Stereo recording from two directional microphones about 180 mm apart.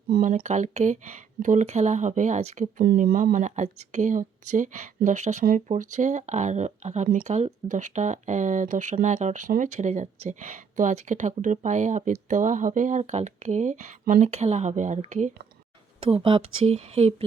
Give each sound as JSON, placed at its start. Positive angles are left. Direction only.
{"t": 0.1, "sound": "speech", "side_deg": -50}
{"t": 2.8, "sound": "speech", "side_deg": -55}
{"t": 16.0, "sound": "speech", "side_deg": -30}